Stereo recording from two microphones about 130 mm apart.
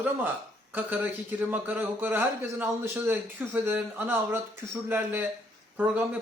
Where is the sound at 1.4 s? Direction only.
15° right (ahead or behind).